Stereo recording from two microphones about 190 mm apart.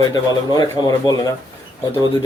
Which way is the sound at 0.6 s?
20° left (ahead or behind).